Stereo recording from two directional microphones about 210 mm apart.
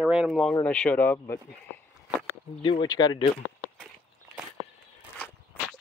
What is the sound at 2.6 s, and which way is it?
Speech, 20° left (ahead or behind).